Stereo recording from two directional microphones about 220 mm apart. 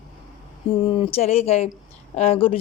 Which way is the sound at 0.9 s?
25° left (ahead or behind).